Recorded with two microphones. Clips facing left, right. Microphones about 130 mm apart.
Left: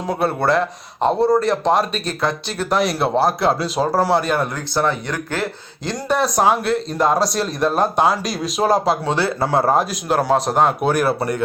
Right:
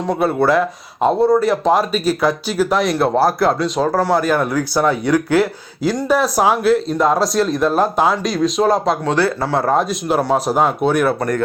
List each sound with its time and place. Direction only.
0.1 s speech: centre (ahead or behind)
9.0 s speech: 25° left (ahead or behind)
9.6 s speech: centre (ahead or behind)